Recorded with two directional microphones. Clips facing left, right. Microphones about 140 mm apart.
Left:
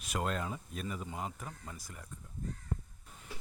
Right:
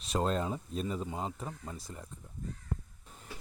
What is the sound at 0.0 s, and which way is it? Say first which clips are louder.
Speech: right 5 dB; 30° right (ahead or behind).